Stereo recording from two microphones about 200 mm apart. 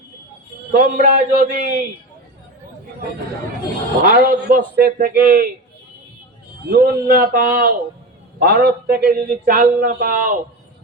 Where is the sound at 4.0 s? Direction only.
45° right (ahead or behind).